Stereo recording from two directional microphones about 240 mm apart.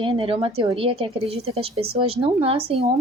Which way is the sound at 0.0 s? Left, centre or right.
Right.